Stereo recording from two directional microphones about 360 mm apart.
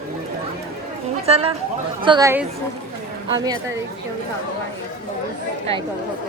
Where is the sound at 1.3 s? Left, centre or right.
Centre.